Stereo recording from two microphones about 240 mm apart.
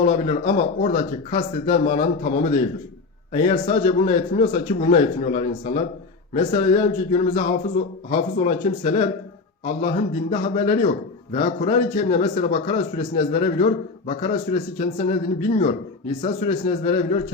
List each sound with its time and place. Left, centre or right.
0.0 s speech: left